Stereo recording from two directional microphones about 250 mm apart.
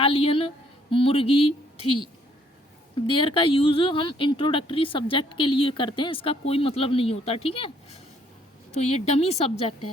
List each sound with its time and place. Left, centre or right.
0.0 s a woman's voice: left
2.9 s speech: left